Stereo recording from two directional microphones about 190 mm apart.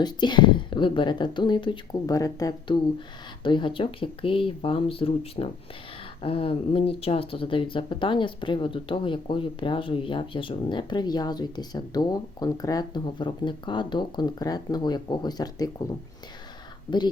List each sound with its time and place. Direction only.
0.0 s speech: 25° left (ahead or behind)